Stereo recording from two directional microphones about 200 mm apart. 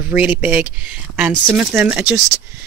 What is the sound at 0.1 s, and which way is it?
Speech, 5° right (ahead or behind).